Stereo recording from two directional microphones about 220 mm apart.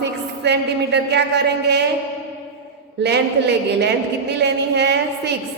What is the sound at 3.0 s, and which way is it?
A woman's voice, 50° right (ahead or behind).